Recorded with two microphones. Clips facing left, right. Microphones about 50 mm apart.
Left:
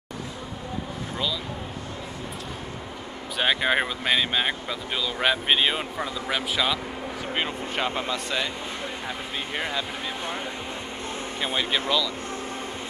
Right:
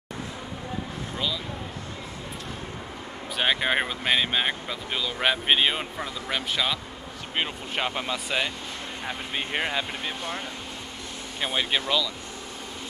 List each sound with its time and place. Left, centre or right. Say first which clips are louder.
3.3 s speech: left 1 dB; centre
9.5 s speech: right 1 dB; centre
11.4 s speech: even; centre